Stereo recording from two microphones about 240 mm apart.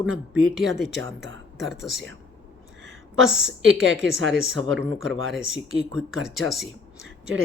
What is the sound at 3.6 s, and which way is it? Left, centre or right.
Speech, right.